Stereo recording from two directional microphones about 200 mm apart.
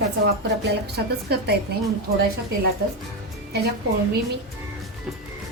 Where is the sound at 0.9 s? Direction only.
55° right (ahead or behind).